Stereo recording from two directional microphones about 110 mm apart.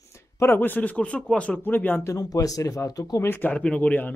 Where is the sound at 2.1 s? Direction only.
35° left (ahead or behind).